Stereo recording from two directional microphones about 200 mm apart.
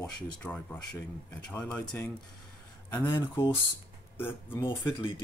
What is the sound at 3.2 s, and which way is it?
Speech, 20° left (ahead or behind).